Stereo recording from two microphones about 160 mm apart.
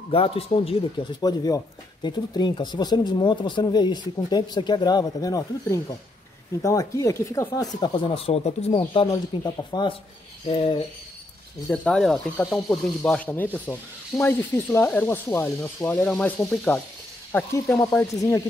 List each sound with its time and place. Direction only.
0.1 s speech: 35° left (ahead or behind)
1.2 s speech: 25° left (ahead or behind)
7.8 s speech: 30° left (ahead or behind)
11.7 s speech: 5° left (ahead or behind)